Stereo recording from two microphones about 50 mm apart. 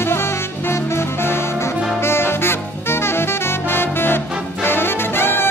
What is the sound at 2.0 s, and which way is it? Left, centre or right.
Saxophone, left.